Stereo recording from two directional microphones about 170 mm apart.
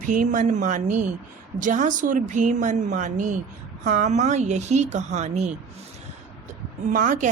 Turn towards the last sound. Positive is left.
turn(degrees=-50)  # may be behind; listen again after turning